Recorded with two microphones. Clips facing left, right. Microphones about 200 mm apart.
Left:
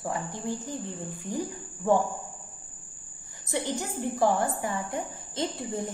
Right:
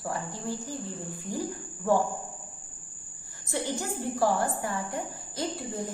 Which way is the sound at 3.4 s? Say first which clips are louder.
Left 1 dB; 20° left (ahead or behind).